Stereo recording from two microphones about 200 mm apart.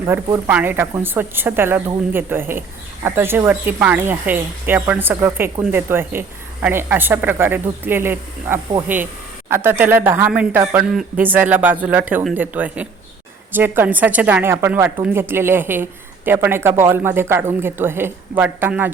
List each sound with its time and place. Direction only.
0.0 s a woman's voice: 20° right (ahead or behind)